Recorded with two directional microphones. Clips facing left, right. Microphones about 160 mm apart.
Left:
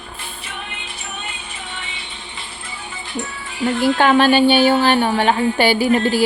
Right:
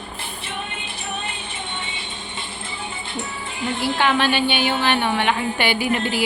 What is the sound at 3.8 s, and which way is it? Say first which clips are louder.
Speech: left 6 dB; 45° left (ahead or behind).